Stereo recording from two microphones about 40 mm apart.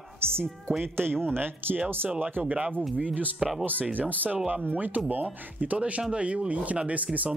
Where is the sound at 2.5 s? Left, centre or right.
Right.